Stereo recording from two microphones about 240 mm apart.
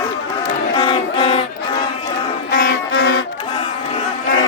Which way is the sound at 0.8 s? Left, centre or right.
Left.